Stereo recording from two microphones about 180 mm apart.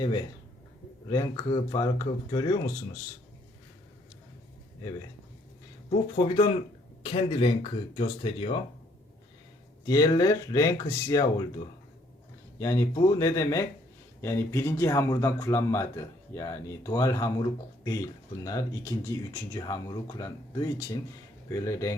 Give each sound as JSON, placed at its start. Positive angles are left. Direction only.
{"t": 1.1, "sound": "speech", "side_deg": 25}
{"t": 5.9, "sound": "speech", "side_deg": 30}
{"t": 9.8, "sound": "speech", "side_deg": 20}